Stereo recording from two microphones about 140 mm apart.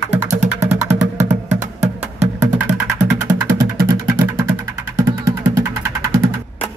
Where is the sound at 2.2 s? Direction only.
60° right (ahead or behind).